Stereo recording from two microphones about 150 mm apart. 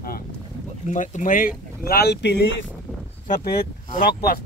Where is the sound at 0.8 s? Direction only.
55° left (ahead or behind); by 2.3 s 90° left.